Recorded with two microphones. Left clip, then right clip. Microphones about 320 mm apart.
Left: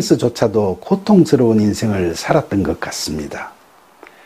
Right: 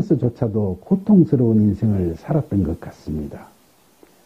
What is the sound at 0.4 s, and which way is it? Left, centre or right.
Speech, left.